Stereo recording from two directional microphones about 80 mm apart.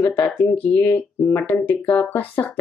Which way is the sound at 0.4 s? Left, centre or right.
Left.